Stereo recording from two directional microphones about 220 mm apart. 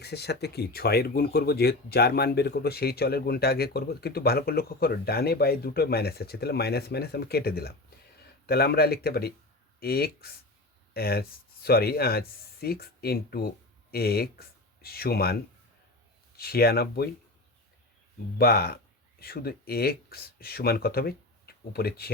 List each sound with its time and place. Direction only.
0.0 s speech: 50° left (ahead or behind)
16.4 s speech: 45° left (ahead or behind)
18.3 s speech: 45° left (ahead or behind)